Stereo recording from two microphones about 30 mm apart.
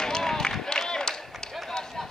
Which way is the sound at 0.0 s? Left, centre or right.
Centre.